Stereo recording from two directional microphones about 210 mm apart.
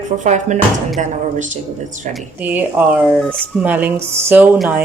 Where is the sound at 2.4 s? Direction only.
10° right (ahead or behind).